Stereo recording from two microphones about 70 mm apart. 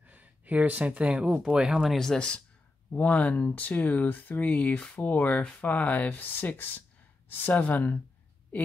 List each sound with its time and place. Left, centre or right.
0.0 s speech: right; by 2.0 s centre
2.0 s speech: centre